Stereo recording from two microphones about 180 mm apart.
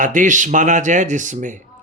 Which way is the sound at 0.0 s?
45° right (ahead or behind).